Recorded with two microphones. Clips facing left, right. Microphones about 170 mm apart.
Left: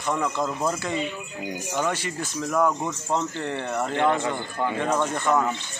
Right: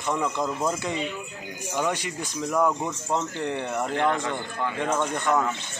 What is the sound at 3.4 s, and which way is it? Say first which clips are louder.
Speech: even; 15° right (ahead or behind).